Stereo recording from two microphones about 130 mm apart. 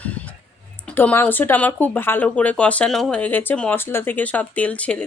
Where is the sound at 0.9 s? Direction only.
15° left (ahead or behind).